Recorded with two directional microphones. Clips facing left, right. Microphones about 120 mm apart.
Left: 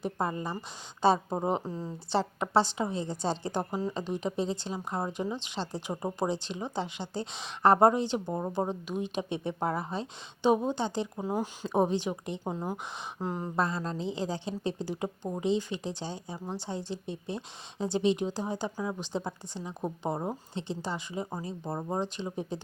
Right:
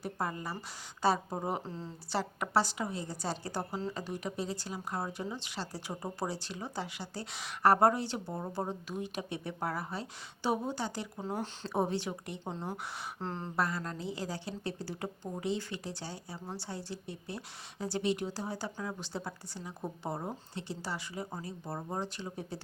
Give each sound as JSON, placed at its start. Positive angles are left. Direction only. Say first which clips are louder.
{"t": 0.0, "sound": "a woman's voice", "louder": "left 5 dB", "side_deg": 25}
{"t": 2.0, "sound": "a woman's voice", "louder": "left 5 dB", "side_deg": 25}
{"t": 13.6, "sound": "a woman's voice", "louder": "left 3 dB", "side_deg": 25}